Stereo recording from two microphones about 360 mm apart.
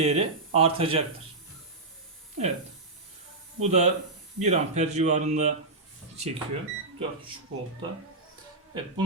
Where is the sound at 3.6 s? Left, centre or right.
Centre.